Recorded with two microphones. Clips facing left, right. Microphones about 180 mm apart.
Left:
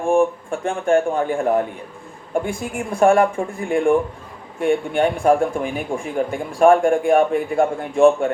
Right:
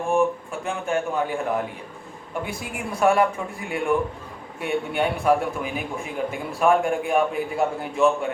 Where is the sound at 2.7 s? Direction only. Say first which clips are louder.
Left 5 dB; 50° left (ahead or behind).